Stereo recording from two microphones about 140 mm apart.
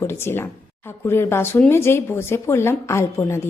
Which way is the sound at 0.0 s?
15° left (ahead or behind).